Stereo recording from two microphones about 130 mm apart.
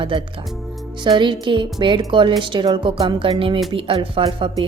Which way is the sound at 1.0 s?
40° right (ahead or behind).